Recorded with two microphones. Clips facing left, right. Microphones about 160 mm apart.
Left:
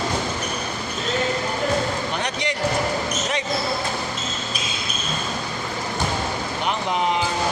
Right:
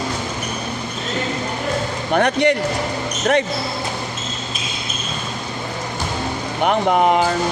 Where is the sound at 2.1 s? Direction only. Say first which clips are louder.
Right 10 dB; 55° right (ahead or behind).